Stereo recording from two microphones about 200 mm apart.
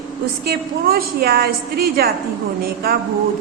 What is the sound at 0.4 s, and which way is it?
A woman's voice, 50° right (ahead or behind).